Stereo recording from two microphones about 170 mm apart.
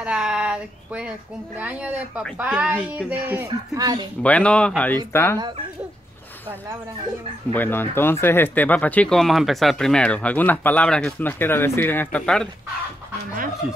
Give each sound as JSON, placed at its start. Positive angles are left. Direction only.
{"t": 0.0, "sound": "speech", "side_deg": -5}
{"t": 3.7, "sound": "speech", "side_deg": -25}
{"t": 4.2, "sound": "speech", "side_deg": 5}
{"t": 7.5, "sound": "speech", "side_deg": 10}